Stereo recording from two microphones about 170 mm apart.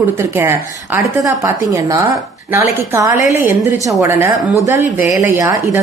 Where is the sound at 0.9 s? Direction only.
15° right (ahead or behind).